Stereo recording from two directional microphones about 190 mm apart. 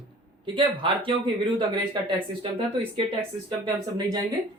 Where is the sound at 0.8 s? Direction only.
25° right (ahead or behind).